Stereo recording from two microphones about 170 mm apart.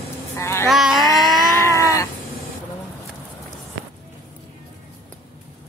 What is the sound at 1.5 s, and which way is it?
Cat, 15° left (ahead or behind).